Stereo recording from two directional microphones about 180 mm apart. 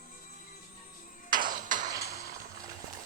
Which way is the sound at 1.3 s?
50° right (ahead or behind).